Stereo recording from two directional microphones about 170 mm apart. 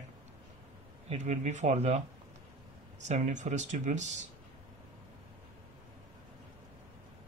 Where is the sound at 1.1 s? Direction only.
45° right (ahead or behind).